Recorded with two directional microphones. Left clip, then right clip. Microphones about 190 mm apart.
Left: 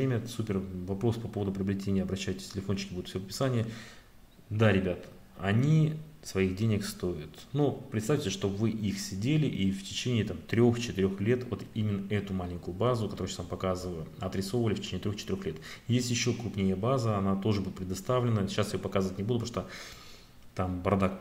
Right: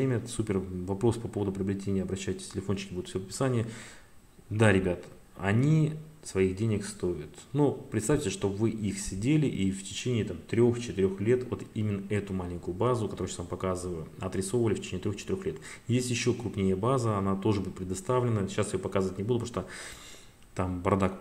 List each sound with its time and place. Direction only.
0.0 s speech: 10° right (ahead or behind)